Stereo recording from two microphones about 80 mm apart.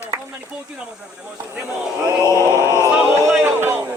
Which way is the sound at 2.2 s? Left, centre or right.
Left.